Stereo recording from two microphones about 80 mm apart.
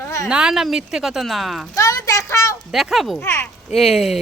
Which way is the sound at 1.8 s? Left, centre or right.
Left.